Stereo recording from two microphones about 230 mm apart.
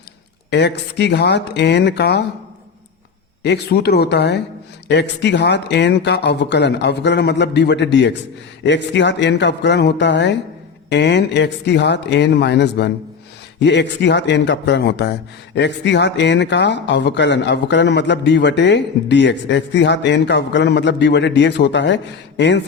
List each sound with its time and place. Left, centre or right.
0.5 s speech: left
3.4 s speech: left